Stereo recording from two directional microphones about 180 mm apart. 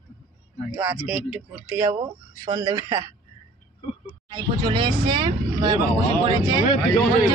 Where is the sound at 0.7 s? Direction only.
10° right (ahead or behind).